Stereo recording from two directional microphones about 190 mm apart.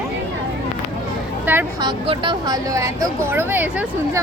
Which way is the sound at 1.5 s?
10° right (ahead or behind).